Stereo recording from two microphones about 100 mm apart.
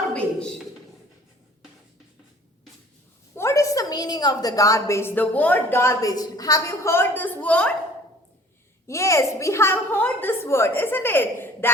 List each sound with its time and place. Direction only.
0.1 s a sound: 10° left (ahead or behind)
3.3 s a woman's voice: 30° left (ahead or behind); by 7.7 s 15° left (ahead or behind)
8.9 s a woman's voice: 30° left (ahead or behind)